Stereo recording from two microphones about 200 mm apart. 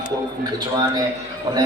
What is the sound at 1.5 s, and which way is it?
Speech, 20° right (ahead or behind).